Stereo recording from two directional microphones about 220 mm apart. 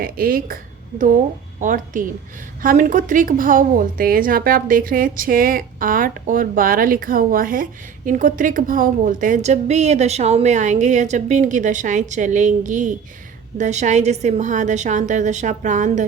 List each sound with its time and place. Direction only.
0.0 s a woman's voice: 40° right (ahead or behind)